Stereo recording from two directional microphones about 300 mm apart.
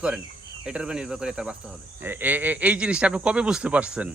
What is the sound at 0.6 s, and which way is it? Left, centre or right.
A man's voice, centre.